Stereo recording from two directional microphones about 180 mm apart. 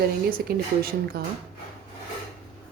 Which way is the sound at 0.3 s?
55° right (ahead or behind).